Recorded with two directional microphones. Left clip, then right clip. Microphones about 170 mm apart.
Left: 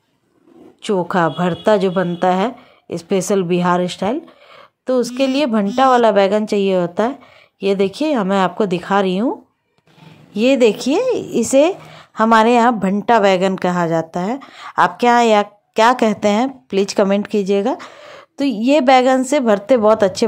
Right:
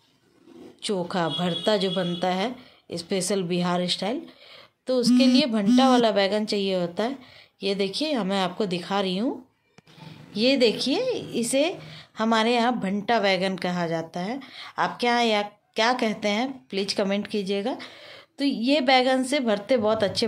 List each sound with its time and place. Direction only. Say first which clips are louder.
0.8 s a woman's voice: left 10 dB; 40° left (ahead or behind)
10.4 s a woman's voice: left 8 dB; 40° left (ahead or behind)